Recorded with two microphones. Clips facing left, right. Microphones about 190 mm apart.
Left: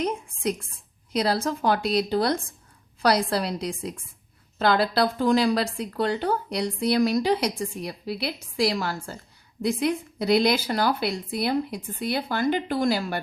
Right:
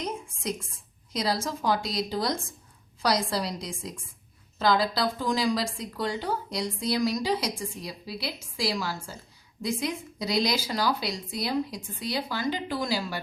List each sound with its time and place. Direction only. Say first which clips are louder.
0.4 s a woman's voice: left 6 dB; 60° left (ahead or behind)